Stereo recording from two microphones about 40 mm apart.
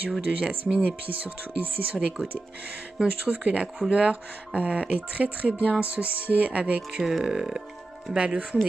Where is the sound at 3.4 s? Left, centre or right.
Right.